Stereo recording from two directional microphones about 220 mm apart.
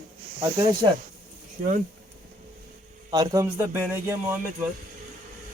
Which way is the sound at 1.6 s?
35° right (ahead or behind).